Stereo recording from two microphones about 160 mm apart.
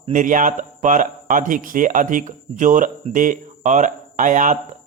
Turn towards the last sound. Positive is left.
turn(degrees=-50)  # may be behind; listen again after turning